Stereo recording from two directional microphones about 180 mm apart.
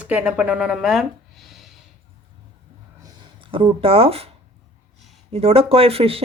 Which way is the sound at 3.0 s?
25° right (ahead or behind).